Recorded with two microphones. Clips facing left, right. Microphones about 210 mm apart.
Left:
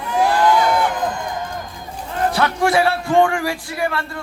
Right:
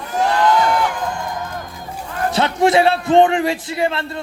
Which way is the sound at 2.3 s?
20° right (ahead or behind).